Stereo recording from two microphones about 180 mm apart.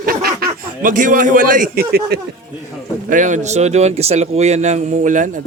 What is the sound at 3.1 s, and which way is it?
Speech, 45° right (ahead or behind).